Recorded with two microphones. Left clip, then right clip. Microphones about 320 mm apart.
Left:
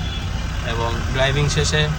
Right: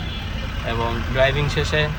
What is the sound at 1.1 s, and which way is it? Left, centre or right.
Speech, centre.